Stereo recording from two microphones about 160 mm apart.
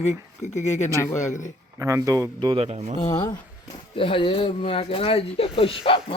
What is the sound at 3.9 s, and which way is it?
Speech, 35° left (ahead or behind).